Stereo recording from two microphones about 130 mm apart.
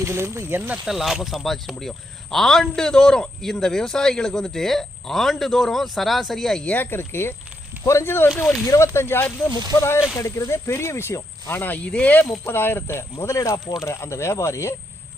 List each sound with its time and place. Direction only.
0.0 s speech: 20° right (ahead or behind)
0.9 s speech: centre (ahead or behind); by 14.8 s 20° left (ahead or behind)